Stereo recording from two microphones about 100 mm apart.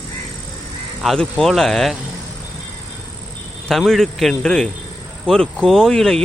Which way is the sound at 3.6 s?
Centre (ahead or behind).